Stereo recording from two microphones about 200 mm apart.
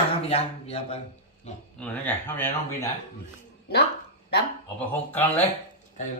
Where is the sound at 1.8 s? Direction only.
10° left (ahead or behind).